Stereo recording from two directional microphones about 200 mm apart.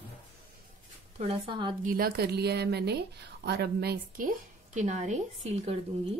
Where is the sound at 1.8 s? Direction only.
45° right (ahead or behind).